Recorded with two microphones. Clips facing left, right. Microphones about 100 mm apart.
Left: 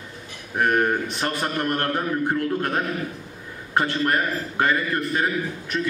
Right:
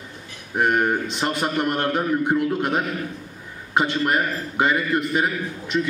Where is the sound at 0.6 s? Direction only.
15° right (ahead or behind).